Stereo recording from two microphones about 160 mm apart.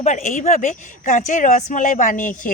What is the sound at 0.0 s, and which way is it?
Speech, 50° left (ahead or behind).